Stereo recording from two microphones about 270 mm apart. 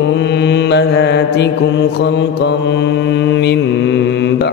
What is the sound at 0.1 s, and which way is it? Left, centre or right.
Mantra, left.